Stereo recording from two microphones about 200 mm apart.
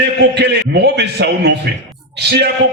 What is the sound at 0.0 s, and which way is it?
A man's voice, 60° right (ahead or behind).